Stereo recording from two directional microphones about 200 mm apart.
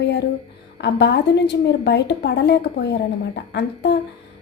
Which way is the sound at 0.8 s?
60° left (ahead or behind).